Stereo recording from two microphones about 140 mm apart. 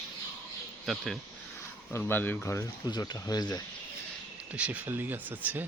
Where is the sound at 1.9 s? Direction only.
15° left (ahead or behind).